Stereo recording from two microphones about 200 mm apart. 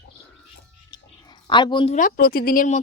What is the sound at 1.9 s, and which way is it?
Speech, 45° left (ahead or behind).